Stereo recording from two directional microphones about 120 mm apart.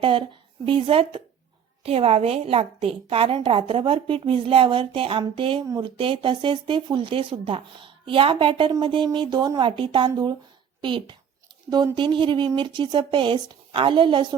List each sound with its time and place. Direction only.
0.0 s a woman's voice: 45° right (ahead or behind)